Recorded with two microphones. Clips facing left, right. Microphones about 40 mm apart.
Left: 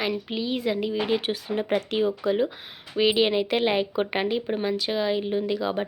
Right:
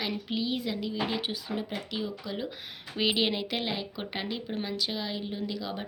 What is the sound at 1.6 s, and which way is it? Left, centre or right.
Speech, left.